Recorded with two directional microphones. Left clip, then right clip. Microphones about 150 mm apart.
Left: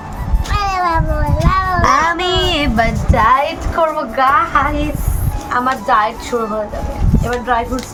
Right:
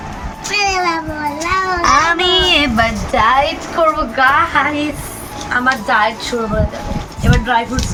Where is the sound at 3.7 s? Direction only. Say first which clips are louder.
Right 1 dB; 10° left (ahead or behind).